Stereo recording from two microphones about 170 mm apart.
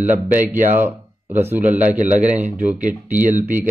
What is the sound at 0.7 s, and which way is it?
Speech, 10° right (ahead or behind).